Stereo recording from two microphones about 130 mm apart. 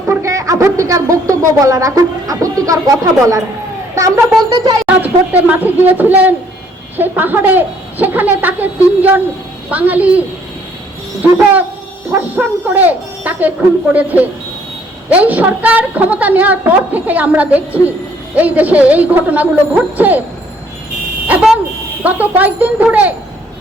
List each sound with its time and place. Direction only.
0.1 s a woman's voice: 25° right (ahead or behind)
3.9 s a sound: 25° right (ahead or behind)
4.5 s speech: 30° right (ahead or behind)
4.9 s a woman's voice: 15° right (ahead or behind)
21.2 s a sound: 10° right (ahead or behind)
22.0 s a woman's voice: 10° right (ahead or behind)